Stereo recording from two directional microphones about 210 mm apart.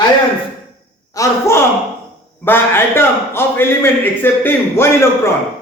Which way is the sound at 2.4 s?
10° left (ahead or behind).